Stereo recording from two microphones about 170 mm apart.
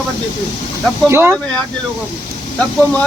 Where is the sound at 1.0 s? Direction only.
15° right (ahead or behind).